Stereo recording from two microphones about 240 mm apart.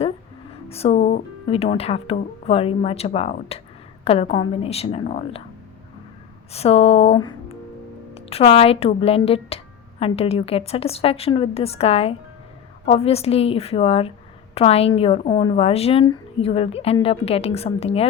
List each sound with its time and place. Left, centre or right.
0.7 s a woman's voice: left
6.5 s a woman's voice: left